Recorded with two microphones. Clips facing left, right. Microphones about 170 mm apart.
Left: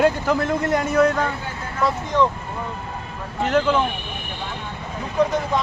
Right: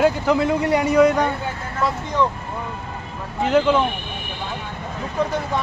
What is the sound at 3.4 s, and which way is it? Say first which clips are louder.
Speech: right 2 dB; 10° right (ahead or behind).